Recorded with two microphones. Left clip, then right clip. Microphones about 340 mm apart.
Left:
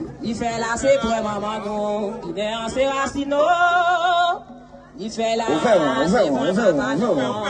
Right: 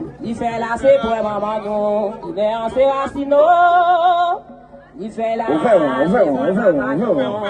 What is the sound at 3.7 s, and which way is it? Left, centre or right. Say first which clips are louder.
Music: right 4 dB; centre.